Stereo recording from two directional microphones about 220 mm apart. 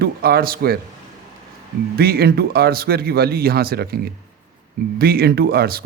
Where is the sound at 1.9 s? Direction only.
45° right (ahead or behind).